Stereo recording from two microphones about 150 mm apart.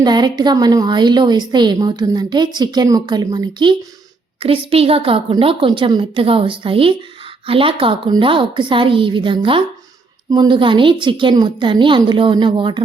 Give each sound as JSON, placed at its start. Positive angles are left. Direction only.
{"t": 0.0, "sound": "a woman's voice", "side_deg": -30}